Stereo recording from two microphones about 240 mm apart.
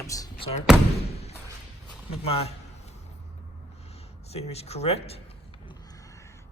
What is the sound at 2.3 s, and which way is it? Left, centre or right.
Speech, left.